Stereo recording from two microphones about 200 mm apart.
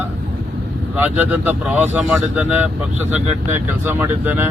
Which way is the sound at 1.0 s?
10° right (ahead or behind).